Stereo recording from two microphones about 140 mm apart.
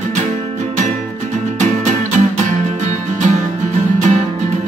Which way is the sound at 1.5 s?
55° right (ahead or behind).